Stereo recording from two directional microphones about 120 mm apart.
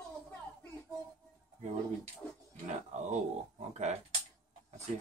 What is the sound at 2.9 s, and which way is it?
Speech, 70° right (ahead or behind).